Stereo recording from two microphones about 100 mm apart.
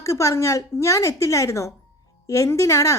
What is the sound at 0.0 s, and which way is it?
A woman's voice, 30° left (ahead or behind).